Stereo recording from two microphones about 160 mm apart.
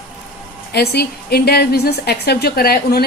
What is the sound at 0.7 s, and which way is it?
A woman's voice, 85° left.